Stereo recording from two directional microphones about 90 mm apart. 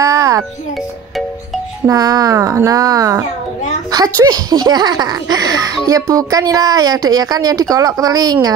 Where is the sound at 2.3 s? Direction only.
35° right (ahead or behind).